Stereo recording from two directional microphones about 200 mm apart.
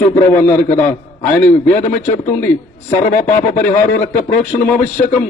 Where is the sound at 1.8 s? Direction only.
35° left (ahead or behind).